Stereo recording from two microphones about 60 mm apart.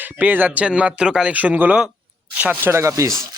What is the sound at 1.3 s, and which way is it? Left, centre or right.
Speech, right.